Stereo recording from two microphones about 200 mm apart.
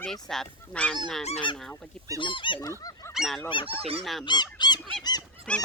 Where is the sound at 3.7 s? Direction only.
30° right (ahead or behind).